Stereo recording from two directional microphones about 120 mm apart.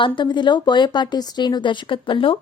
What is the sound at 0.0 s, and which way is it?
A woman's voice, 40° left (ahead or behind).